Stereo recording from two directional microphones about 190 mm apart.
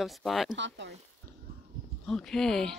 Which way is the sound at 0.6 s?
70° right (ahead or behind).